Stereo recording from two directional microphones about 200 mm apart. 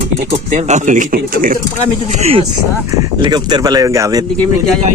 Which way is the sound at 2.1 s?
30° right (ahead or behind).